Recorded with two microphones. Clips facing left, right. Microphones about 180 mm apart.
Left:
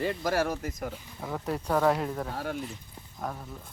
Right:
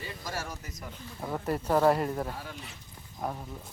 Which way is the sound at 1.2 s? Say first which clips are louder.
Right 1 dB; 5° right (ahead or behind).